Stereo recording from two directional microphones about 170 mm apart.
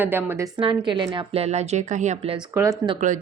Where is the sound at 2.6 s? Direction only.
20° right (ahead or behind).